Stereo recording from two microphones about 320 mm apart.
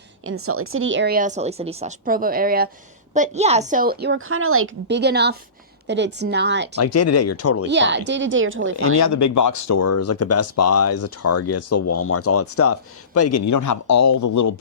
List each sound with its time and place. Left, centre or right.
0.3 s a woman's voice: right
6.7 s speech: left
7.7 s a woman's voice: right
9.0 s a man's voice: left